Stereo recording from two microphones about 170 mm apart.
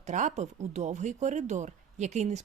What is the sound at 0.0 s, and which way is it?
Speech, 45° right (ahead or behind).